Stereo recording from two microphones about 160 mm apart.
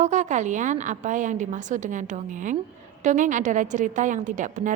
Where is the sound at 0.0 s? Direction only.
50° right (ahead or behind).